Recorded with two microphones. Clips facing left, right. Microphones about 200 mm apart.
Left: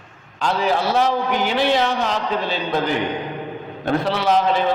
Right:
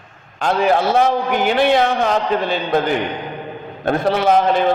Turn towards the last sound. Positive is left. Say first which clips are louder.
# right 3 dB
turn(degrees=-50)  # may be behind; listen again after turning